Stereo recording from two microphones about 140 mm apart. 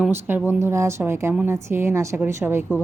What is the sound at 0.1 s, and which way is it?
Speech, 15° right (ahead or behind).